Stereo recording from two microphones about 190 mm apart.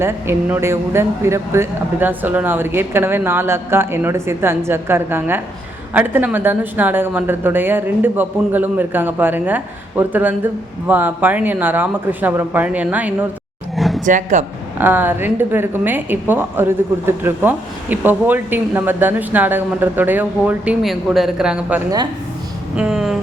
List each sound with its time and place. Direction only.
0.0 s a woman's voice: 10° right (ahead or behind)
13.7 s roar: centre (ahead or behind)
14.0 s speech: 40° right (ahead or behind)
14.8 s a woman's voice: 10° right (ahead or behind)